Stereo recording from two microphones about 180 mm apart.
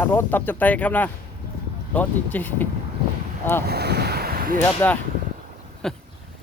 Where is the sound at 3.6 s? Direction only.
65° right (ahead or behind).